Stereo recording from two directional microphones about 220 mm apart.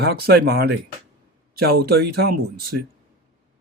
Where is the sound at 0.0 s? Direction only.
45° right (ahead or behind).